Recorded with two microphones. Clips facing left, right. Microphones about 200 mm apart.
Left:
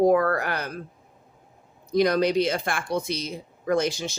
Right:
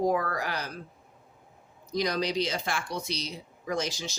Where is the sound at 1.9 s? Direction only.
55° left (ahead or behind).